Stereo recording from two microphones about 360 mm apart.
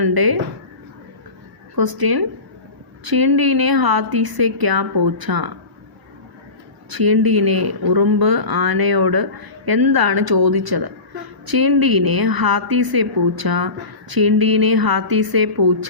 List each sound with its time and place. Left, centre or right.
0.0 s speech: right
1.7 s a woman's voice: right
6.9 s a woman's voice: right
11.4 s a woman's voice: right